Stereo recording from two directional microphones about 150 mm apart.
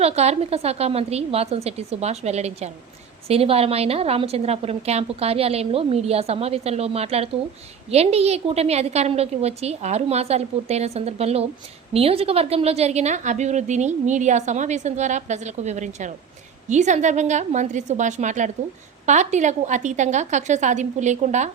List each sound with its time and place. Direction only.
0.0 s a woman's voice: 45° right (ahead or behind)